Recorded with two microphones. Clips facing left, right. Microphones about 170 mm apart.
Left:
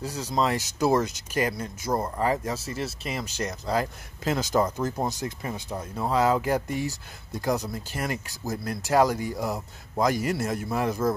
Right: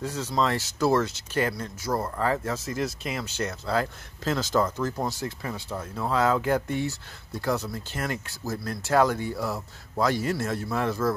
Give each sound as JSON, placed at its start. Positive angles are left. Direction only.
{"t": 0.0, "sound": "speech", "side_deg": 10}
{"t": 2.6, "sound": "speech", "side_deg": 5}
{"t": 7.4, "sound": "speech", "side_deg": 15}